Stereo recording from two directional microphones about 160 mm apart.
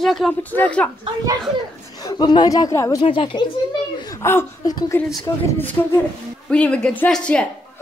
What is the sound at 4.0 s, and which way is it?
A man's voice, 20° left (ahead or behind).